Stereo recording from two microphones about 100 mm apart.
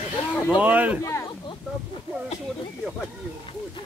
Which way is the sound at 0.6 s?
15° right (ahead or behind).